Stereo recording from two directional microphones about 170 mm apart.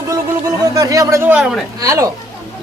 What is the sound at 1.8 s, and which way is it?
Speech, 20° right (ahead or behind).